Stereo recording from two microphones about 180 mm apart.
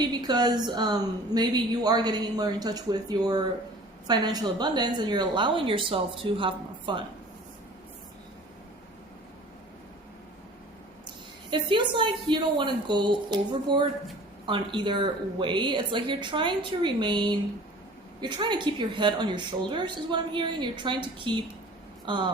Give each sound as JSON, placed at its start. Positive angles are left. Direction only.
{"t": 0.0, "sound": "a woman's voice", "side_deg": -25}
{"t": 11.5, "sound": "a woman's voice", "side_deg": -25}